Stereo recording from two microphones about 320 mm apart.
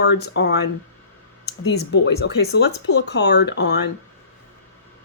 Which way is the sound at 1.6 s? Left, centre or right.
Left.